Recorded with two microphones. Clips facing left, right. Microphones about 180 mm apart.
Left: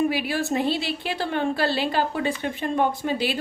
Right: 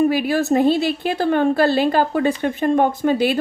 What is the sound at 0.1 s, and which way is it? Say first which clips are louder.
A woman's voice: right 7 dB; 45° right (ahead or behind).